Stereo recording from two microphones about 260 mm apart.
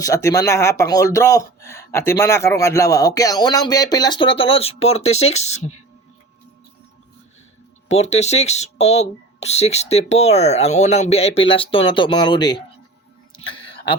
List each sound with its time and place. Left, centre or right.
0.0 s speech: centre
7.9 s speech: left
13.3 s a sound: centre